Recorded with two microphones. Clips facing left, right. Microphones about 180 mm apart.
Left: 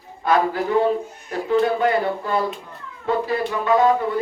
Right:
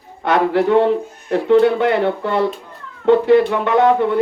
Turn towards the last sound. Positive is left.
turn(degrees=-70)  # may be behind; listen again after turning